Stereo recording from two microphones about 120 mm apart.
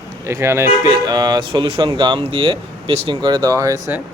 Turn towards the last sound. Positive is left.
turn(degrees=-25)  # may be behind; listen again after turning